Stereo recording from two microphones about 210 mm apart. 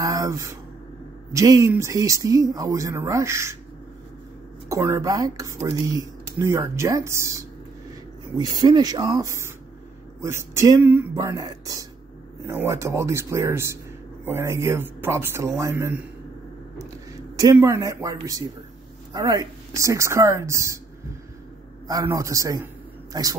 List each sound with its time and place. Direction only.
0.0 s speech: 15° right (ahead or behind)
4.6 s speech: 15° right (ahead or behind)
17.4 s speech: 15° right (ahead or behind)
21.8 s speech: 15° right (ahead or behind)